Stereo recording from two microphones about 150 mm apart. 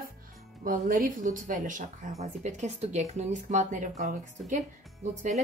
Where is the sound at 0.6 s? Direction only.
65° right (ahead or behind).